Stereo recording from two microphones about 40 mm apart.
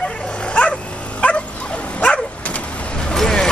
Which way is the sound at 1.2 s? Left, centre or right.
Left.